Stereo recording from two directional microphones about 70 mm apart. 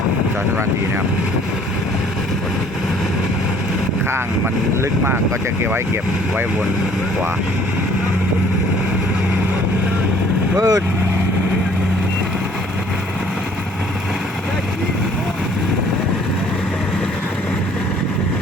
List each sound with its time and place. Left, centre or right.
10.6 s speech: right